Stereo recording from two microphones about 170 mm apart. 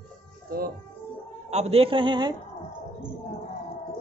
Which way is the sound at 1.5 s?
40° right (ahead or behind).